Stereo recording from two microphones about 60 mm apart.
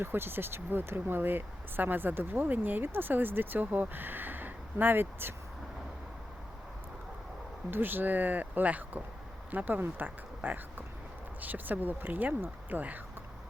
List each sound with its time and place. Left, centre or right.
0.0 s speech: right
7.7 s speech: right